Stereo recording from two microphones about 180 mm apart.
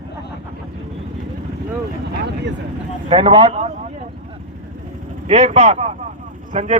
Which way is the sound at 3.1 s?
30° right (ahead or behind).